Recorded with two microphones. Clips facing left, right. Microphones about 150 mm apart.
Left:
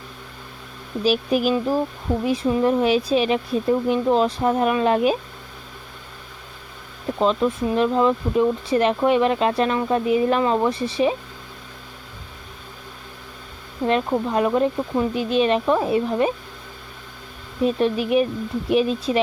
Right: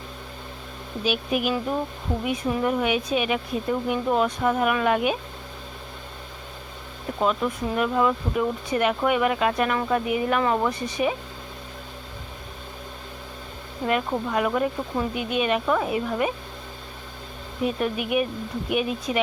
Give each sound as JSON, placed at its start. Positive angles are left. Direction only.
{"t": 1.0, "sound": "speech", "side_deg": 35}
{"t": 7.2, "sound": "speech", "side_deg": 25}
{"t": 14.3, "sound": "speech", "side_deg": 25}
{"t": 17.6, "sound": "speech", "side_deg": 30}